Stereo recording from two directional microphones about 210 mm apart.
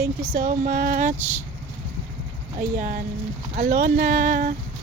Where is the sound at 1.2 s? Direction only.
10° right (ahead or behind).